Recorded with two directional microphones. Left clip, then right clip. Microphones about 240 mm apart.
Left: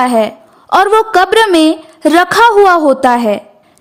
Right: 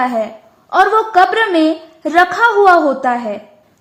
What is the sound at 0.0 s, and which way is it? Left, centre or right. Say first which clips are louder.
A woman's voice: left 6 dB; left.